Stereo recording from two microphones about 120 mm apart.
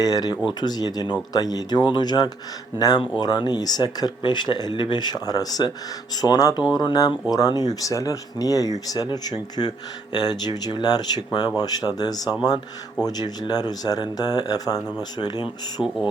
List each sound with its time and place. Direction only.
0.0 s speech: 30° left (ahead or behind)
14.8 s speech: 5° left (ahead or behind)
15.2 s speech: 35° left (ahead or behind)
15.8 s speech: 5° right (ahead or behind)